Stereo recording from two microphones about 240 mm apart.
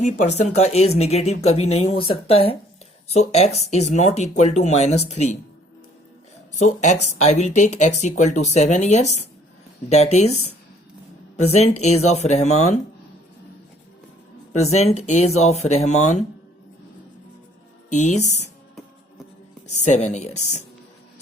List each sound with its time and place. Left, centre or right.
0.0 s speech: left
6.5 s speech: left
14.6 s speech: left
17.9 s speech: left
19.8 s speech: left